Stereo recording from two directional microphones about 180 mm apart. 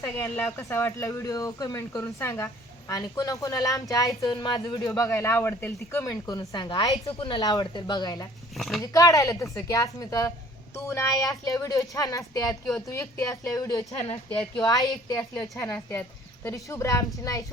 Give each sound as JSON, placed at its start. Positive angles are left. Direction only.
{"t": 0.0, "sound": "speech", "side_deg": 10}
{"t": 8.5, "sound": "speech", "side_deg": 0}
{"t": 8.8, "sound": "speech", "side_deg": 20}